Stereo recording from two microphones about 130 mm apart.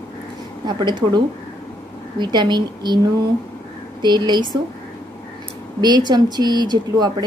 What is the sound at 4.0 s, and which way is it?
Speech, 35° right (ahead or behind).